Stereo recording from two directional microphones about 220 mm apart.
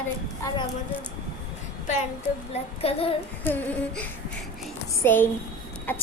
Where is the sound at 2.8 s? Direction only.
25° left (ahead or behind).